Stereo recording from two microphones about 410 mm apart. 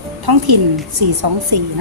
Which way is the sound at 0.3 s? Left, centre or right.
Right.